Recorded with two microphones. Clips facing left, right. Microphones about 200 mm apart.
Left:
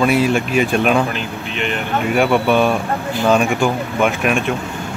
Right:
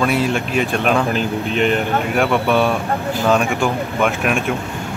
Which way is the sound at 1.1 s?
40° right (ahead or behind).